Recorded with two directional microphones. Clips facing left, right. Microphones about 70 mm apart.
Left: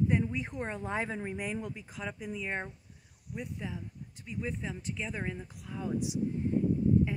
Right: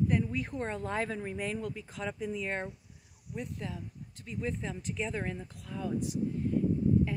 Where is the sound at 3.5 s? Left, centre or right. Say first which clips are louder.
Even; centre.